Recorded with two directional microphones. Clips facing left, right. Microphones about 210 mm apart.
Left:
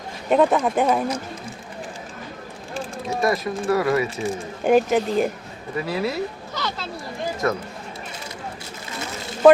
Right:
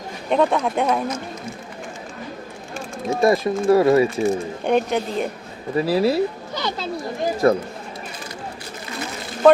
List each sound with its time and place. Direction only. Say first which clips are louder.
0.3 s speech: left 1 dB; 5° left (ahead or behind)
1.0 s speech: even; 30° left (ahead or behind)
3.2 s speech: right 5 dB; 25° right (ahead or behind)
4.6 s speech: left 4 dB; 5° left (ahead or behind)
5.7 s speech: right 7 dB; 30° right (ahead or behind)
7.4 s speech: right 7 dB; 30° right (ahead or behind)